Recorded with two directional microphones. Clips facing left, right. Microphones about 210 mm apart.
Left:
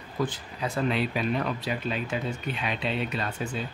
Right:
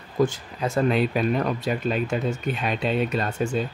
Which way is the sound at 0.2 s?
45° right (ahead or behind).